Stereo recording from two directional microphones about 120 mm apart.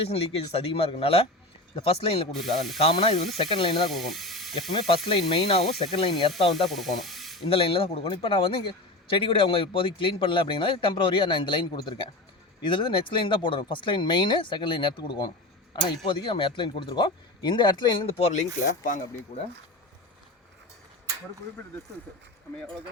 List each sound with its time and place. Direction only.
0.0 s a man's voice: 55° left (ahead or behind)
2.3 s spray: centre (ahead or behind)
2.7 s a man's voice: 50° left (ahead or behind)
3.8 s speech: centre (ahead or behind)
5.0 s a man's voice: 50° left (ahead or behind)
6.7 s speech: centre (ahead or behind)
7.4 s a man's voice: 50° left (ahead or behind)
18.2 s speech: 75° left (ahead or behind)
19.3 s speech: 65° left (ahead or behind)